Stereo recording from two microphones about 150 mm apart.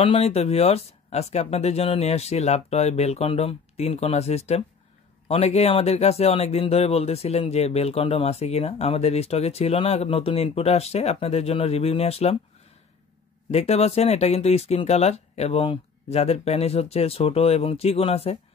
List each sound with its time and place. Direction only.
0.0 s speech: 40° left (ahead or behind)
13.5 s speech: 45° left (ahead or behind)